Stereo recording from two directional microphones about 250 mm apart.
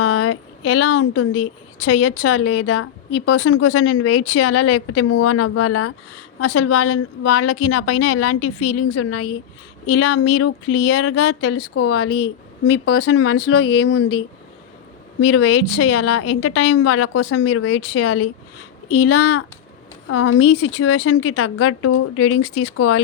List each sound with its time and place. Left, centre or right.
0.0 s a woman's voice: left
15.2 s a woman's voice: left